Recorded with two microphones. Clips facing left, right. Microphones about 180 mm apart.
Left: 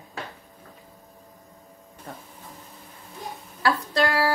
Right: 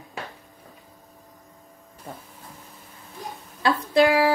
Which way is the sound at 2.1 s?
10° right (ahead or behind).